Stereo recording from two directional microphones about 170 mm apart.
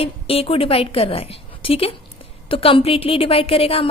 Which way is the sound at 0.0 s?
35° left (ahead or behind).